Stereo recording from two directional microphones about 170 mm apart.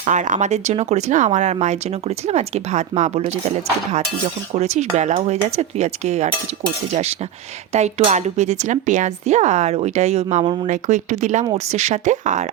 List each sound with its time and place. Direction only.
0.0 s speech: 45° right (ahead or behind)
4.5 s speech: 40° right (ahead or behind)